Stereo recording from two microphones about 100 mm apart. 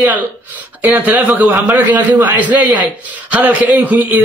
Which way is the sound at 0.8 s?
20° right (ahead or behind).